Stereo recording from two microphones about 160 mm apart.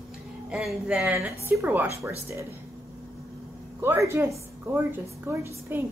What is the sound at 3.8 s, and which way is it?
A woman's voice, 15° right (ahead or behind).